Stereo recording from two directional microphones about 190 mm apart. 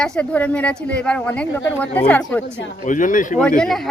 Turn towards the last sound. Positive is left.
turn(degrees=0)  # may be behind; listen again after turning